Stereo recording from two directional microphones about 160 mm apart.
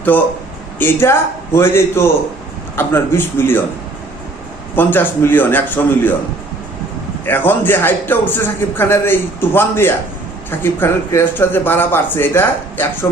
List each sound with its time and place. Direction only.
0.1 s a man's voice: 10° left (ahead or behind)
4.7 s a man's voice: 15° left (ahead or behind)
7.3 s a man's voice: 10° left (ahead or behind)